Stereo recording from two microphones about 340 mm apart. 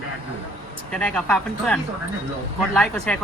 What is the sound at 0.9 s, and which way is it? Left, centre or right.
A woman's voice, centre.